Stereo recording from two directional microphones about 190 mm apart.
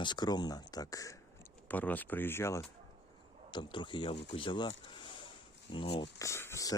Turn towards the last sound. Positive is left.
turn(degrees=15)  # may be behind; listen again after turning